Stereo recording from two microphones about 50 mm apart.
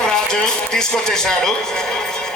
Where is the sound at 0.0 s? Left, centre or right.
Centre.